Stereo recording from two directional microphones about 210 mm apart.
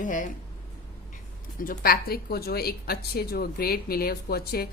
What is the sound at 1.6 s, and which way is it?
Speech, 45° left (ahead or behind).